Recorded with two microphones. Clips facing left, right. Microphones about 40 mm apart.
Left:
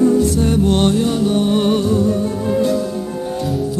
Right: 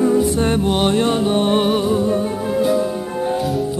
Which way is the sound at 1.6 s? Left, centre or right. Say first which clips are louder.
Left 1 dB; centre.